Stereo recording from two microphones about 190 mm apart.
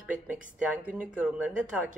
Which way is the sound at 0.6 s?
5° right (ahead or behind).